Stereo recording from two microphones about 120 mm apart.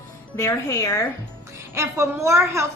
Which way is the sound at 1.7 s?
25° right (ahead or behind).